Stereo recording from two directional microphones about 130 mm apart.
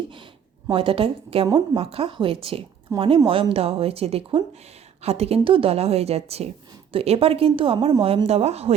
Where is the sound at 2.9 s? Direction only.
25° right (ahead or behind).